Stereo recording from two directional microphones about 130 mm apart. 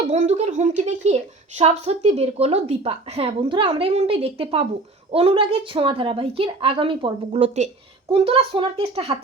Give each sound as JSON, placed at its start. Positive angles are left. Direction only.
{"t": 0.1, "sound": "a woman's voice", "side_deg": -60}
{"t": 8.1, "sound": "a woman's voice", "side_deg": -45}